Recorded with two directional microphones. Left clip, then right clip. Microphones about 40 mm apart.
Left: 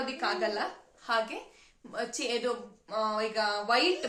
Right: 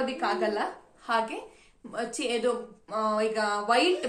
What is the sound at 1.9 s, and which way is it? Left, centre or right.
Speech, right.